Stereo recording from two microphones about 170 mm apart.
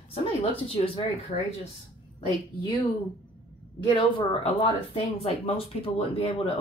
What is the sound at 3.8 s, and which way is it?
Speech, 30° left (ahead or behind).